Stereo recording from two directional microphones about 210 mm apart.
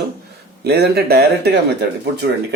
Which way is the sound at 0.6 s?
50° right (ahead or behind).